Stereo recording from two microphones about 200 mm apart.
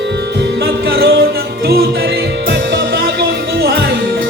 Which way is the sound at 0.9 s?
55° right (ahead or behind).